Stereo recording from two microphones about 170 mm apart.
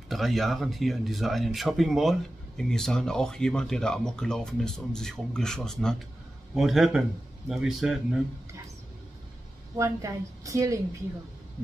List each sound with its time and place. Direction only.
0.1 s speech: centre (ahead or behind)
9.8 s a woman's voice: 20° right (ahead or behind)